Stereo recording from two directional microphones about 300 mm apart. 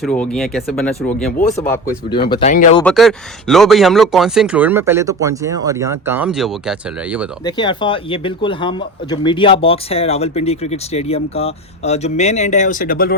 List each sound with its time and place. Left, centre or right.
0.0 s speech: centre
1.4 s speech: left
2.8 s speech: centre
7.4 s speech: centre